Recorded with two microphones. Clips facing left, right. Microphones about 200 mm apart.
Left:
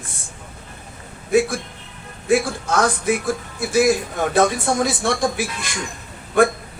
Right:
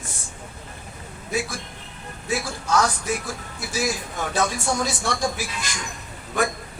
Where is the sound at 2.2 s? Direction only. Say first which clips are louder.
Left 8 dB; 55° left (ahead or behind).